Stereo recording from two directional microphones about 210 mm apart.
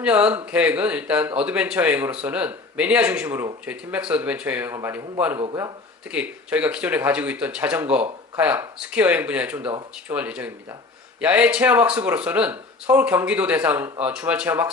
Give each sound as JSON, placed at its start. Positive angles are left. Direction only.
{"t": 0.0, "sound": "speech", "side_deg": -5}
{"t": 6.1, "sound": "speech", "side_deg": -5}